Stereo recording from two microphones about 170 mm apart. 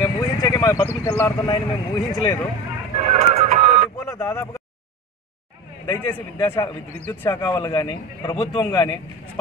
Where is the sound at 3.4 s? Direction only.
40° right (ahead or behind).